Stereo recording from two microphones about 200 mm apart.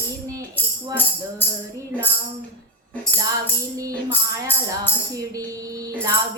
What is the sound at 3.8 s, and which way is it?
Music, 15° right (ahead or behind).